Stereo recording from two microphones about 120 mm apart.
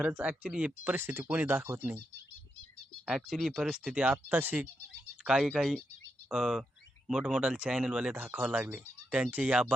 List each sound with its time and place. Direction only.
0.0 s speech: 10° right (ahead or behind)
0.9 s speech: 20° right (ahead or behind)
3.1 s speech: centre (ahead or behind); by 4.7 s 15° right (ahead or behind)
5.2 s speech: 5° right (ahead or behind)